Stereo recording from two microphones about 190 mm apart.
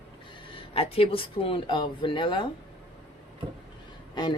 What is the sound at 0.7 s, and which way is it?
Speech, 30° left (ahead or behind).